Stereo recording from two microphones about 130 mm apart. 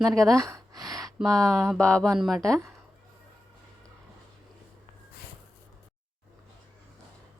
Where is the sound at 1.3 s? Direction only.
5° left (ahead or behind).